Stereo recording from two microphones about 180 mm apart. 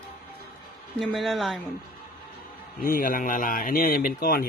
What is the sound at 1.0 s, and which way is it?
Speech, centre (ahead or behind).